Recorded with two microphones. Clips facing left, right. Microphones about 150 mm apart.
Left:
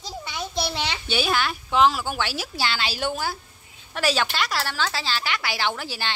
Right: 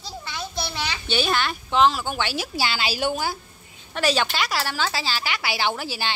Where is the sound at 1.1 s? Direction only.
5° left (ahead or behind).